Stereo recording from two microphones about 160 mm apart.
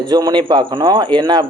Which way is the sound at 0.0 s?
25° right (ahead or behind).